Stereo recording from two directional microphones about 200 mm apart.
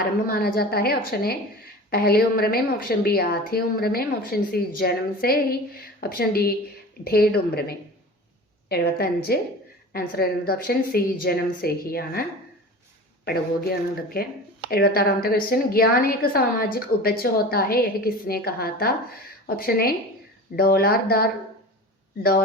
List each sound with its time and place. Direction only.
0.3 s a woman's voice: 50° left (ahead or behind)
13.2 s a woman's voice: 50° left (ahead or behind)